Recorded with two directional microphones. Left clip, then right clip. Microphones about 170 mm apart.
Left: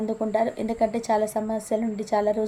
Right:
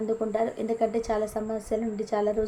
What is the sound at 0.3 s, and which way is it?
A woman's voice, 45° left (ahead or behind).